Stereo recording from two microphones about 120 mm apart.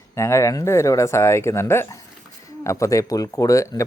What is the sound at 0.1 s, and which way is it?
Speech, 25° left (ahead or behind).